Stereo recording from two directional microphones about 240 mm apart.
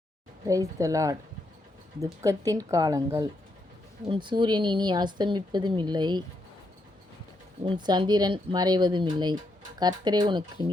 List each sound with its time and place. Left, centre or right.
0.4 s speech: centre
2.2 s a woman's voice: centre
7.6 s speech: centre